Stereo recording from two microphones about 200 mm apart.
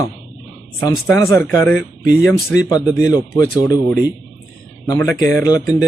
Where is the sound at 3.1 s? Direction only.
15° left (ahead or behind).